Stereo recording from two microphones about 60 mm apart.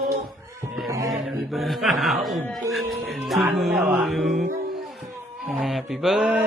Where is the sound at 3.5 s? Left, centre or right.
Centre.